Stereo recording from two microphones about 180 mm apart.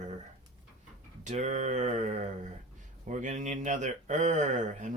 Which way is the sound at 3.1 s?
45° right (ahead or behind).